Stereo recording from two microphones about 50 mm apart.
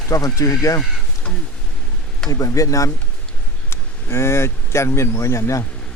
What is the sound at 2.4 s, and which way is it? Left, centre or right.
Speech, left.